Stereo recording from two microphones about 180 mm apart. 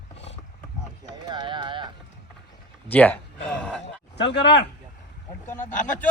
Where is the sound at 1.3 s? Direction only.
25° right (ahead or behind).